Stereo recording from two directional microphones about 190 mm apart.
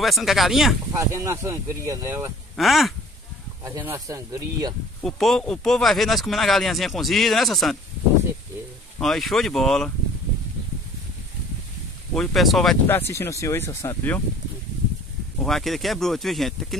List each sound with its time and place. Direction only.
0.0 s speech: centre (ahead or behind)
0.9 s speech: 15° right (ahead or behind)
2.5 s speech: centre (ahead or behind)
3.6 s speech: 15° right (ahead or behind)
5.0 s speech: centre (ahead or behind)
8.9 s speech: centre (ahead or behind)
12.1 s speech: centre (ahead or behind)
12.8 s speech: 10° left (ahead or behind)
15.4 s speech: centre (ahead or behind)